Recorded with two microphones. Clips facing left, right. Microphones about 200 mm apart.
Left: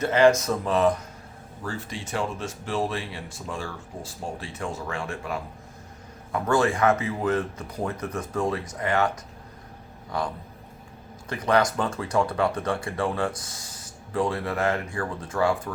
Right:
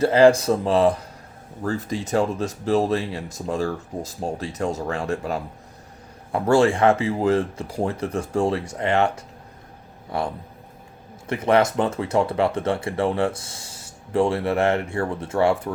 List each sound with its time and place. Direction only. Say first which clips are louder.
0.0 s speech: right 4 dB; 35° right (ahead or behind)
11.4 s speech: right 4 dB; 25° right (ahead or behind)